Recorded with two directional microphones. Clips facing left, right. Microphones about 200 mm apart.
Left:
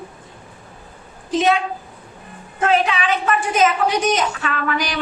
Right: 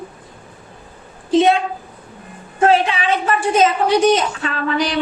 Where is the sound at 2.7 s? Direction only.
30° right (ahead or behind).